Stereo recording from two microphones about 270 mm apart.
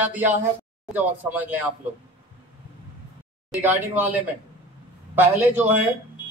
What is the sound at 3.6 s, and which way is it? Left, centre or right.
Speech, centre.